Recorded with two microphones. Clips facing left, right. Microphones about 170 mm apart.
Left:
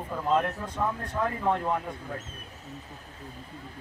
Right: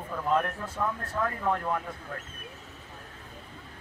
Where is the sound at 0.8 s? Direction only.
20° left (ahead or behind).